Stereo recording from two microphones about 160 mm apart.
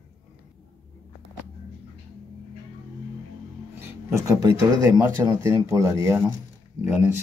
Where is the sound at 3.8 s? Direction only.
20° right (ahead or behind).